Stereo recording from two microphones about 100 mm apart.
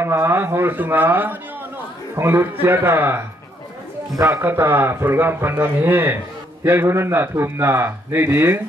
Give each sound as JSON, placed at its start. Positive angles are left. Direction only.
{"t": 0.0, "sound": "a man's voice", "side_deg": -25}